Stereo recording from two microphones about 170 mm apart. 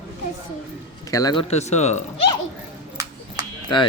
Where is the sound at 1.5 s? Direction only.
40° left (ahead or behind).